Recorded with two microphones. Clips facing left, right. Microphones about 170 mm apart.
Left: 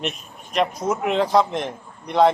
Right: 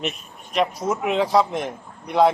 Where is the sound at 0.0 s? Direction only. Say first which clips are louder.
Even; centre (ahead or behind).